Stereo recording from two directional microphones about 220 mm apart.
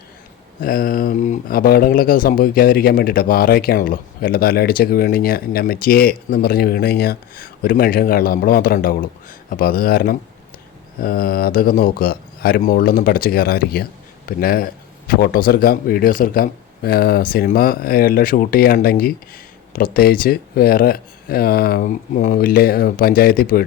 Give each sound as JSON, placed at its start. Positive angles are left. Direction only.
{"t": 0.6, "sound": "speech", "side_deg": 40}